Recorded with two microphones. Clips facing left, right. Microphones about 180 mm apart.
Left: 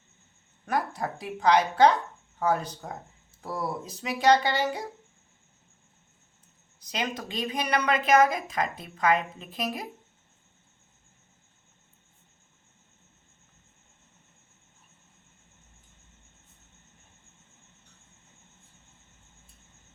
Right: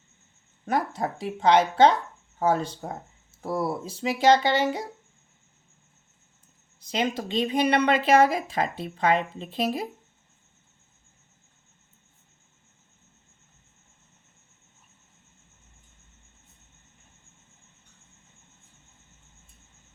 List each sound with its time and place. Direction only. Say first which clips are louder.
0.6 s speech: right 3 dB; 25° right (ahead or behind)
6.7 s speech: right 5 dB; 25° right (ahead or behind)